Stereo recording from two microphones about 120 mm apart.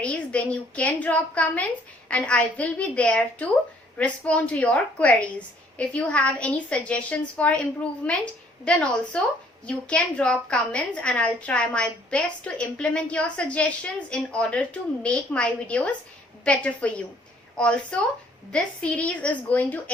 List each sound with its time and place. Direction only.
0.0 s a woman's voice: 10° left (ahead or behind)
18.5 s a woman's voice: 10° left (ahead or behind)